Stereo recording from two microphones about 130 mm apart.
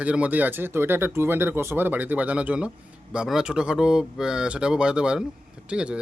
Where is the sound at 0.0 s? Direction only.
10° right (ahead or behind).